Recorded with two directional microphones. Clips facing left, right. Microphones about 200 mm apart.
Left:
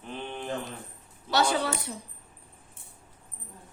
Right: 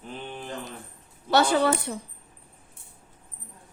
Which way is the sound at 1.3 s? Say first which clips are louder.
Right 5 dB; 55° right (ahead or behind).